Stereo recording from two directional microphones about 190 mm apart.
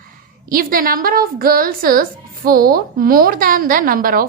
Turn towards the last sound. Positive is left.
turn(degrees=-50)  # may be behind; listen again after turning